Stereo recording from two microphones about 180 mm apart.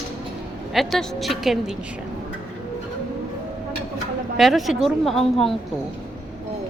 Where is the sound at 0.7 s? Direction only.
Centre (ahead or behind).